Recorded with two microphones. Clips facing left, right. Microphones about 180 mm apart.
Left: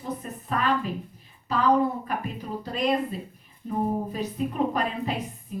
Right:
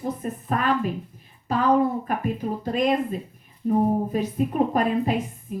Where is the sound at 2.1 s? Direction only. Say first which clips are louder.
Right 5 dB; 50° right (ahead or behind).